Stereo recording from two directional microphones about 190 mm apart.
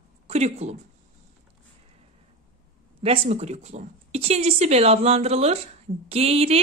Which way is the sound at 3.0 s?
30° right (ahead or behind).